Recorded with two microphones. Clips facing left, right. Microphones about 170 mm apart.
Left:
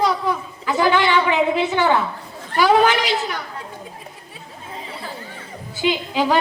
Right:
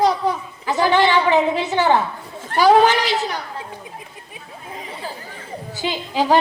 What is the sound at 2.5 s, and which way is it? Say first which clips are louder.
Speech: right 2 dB; 40° right (ahead or behind).